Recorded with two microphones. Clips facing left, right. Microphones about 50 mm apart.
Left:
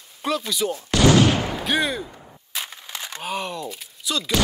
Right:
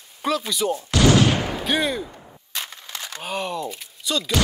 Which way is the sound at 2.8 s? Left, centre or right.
Left.